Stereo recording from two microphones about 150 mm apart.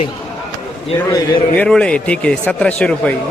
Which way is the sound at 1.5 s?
5° left (ahead or behind).